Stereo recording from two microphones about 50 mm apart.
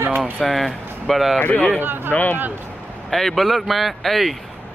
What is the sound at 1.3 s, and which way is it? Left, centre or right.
Speech, left.